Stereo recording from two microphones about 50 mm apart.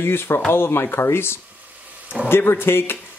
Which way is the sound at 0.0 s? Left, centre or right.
Left.